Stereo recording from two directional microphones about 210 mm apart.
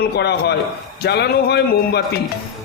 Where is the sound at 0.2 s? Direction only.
50° left (ahead or behind).